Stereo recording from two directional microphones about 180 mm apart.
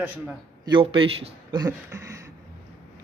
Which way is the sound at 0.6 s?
25° right (ahead or behind).